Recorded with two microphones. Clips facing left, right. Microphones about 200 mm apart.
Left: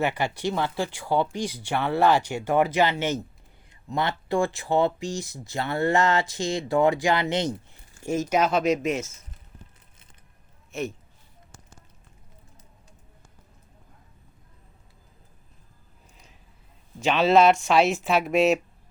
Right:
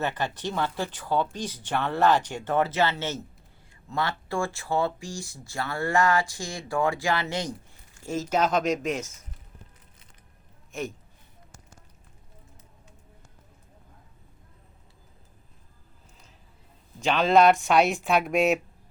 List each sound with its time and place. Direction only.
0.0 s speech: 10° left (ahead or behind)
17.0 s speech: 5° left (ahead or behind)